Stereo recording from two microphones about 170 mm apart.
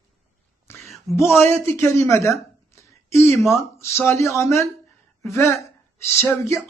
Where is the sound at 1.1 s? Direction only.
15° left (ahead or behind).